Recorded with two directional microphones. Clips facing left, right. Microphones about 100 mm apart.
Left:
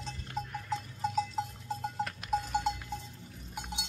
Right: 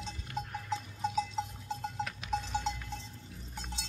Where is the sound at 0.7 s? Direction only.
Centre (ahead or behind).